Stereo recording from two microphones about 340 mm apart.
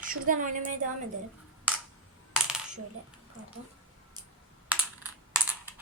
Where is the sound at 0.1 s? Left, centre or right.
Right.